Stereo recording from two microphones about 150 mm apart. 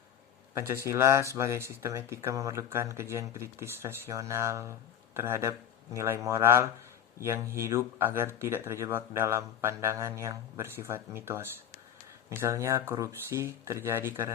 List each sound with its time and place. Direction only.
0.9 s speech: 20° right (ahead or behind)